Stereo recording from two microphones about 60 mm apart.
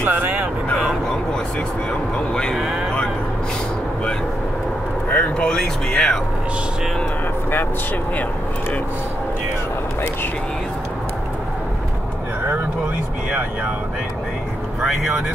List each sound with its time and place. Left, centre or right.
0.0 s vehicle: right
2.1 s speech: centre
2.5 s speech: centre
5.1 s speech: left
14.8 s speech: centre